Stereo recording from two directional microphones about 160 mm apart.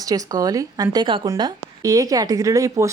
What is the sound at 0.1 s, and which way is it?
Speech, 20° right (ahead or behind).